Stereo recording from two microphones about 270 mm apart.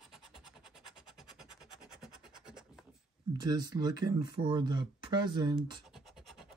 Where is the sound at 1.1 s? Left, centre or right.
Centre.